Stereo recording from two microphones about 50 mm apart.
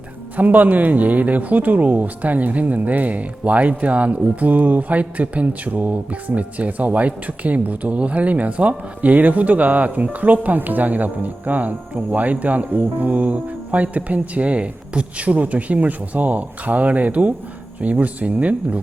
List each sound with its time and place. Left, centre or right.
0.3 s speech: right